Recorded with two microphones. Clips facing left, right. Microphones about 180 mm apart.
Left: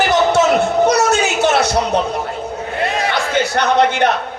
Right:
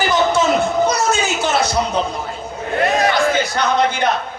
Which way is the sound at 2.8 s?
30° left (ahead or behind).